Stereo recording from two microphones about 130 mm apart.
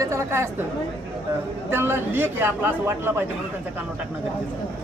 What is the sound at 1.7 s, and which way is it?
A man's voice, 15° right (ahead or behind).